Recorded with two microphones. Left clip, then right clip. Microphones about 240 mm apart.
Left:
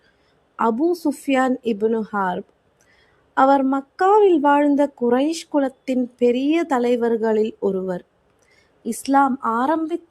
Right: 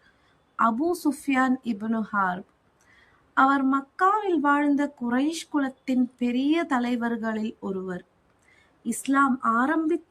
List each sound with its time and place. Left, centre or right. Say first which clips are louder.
0.5 s a woman's voice: left 4 dB; centre